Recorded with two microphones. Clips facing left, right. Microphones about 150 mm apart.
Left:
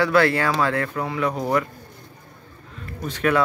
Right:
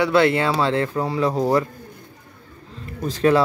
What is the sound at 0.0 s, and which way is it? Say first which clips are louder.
Speech: right 1 dB; 20° right (ahead or behind).